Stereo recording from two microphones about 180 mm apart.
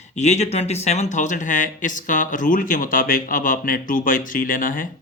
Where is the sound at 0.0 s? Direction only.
40° left (ahead or behind).